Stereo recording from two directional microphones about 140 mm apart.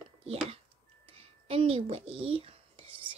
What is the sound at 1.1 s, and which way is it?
Whispering, 45° right (ahead or behind).